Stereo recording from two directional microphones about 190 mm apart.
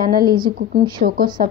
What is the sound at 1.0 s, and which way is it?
Speech, 50° right (ahead or behind).